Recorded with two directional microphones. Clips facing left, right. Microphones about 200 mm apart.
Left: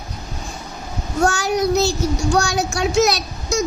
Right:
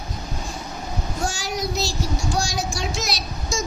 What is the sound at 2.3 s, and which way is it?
Speech, 65° left (ahead or behind).